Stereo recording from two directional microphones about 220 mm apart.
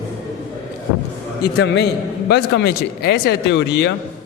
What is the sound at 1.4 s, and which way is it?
A man's voice, 50° left (ahead or behind).